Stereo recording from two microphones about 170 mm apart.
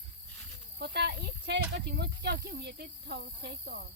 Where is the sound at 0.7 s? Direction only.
75° right (ahead or behind).